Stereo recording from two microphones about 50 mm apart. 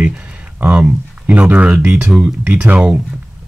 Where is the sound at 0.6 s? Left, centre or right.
Right.